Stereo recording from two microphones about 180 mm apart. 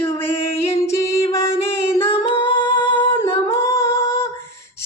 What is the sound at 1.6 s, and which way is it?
Child singing, 15° left (ahead or behind).